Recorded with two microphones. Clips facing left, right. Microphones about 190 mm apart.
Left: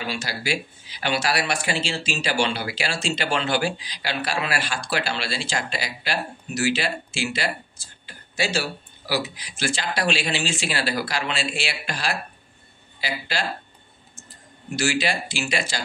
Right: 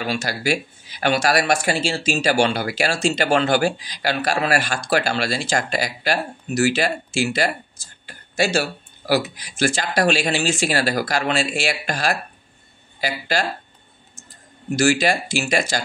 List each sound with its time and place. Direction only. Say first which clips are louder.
0.0 s speech: right 6 dB; 45° right (ahead or behind)
14.8 s speech: right 6 dB; 45° right (ahead or behind)